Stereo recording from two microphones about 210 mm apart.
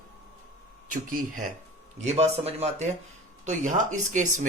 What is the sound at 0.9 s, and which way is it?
Speech, 40° right (ahead or behind).